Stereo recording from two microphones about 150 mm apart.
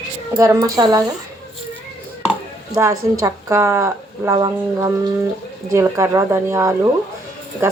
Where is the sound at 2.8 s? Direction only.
20° right (ahead or behind).